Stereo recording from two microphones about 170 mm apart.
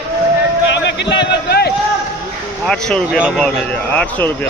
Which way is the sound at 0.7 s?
90° left.